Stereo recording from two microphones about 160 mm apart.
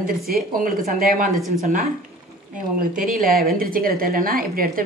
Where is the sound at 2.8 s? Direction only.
60° right (ahead or behind).